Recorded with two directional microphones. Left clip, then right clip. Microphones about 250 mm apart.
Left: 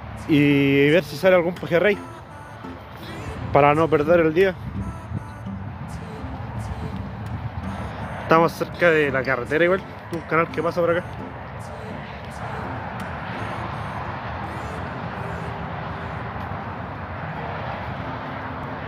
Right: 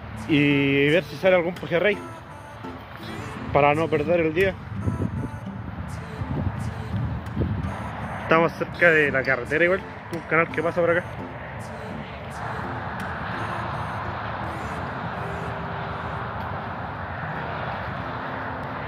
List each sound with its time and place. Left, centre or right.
0.3 s speech: left
3.5 s speech: left
8.3 s speech: centre
10.3 s speech: centre
13.4 s a sound: centre
14.5 s music: centre